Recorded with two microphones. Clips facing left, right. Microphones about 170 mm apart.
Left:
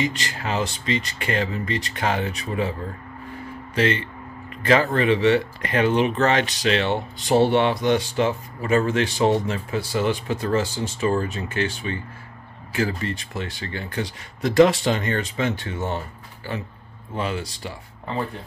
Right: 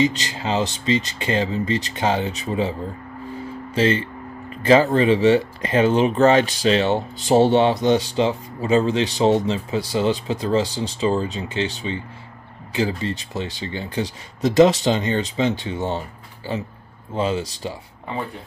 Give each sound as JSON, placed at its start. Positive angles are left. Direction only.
{"t": 0.0, "sound": "speech", "side_deg": -25}
{"t": 3.7, "sound": "speech", "side_deg": -30}
{"t": 17.1, "sound": "speech", "side_deg": -25}